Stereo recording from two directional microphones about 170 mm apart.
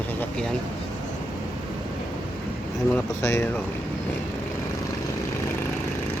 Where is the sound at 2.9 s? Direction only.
15° left (ahead or behind).